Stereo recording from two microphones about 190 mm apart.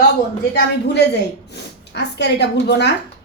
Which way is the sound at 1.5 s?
65° left (ahead or behind).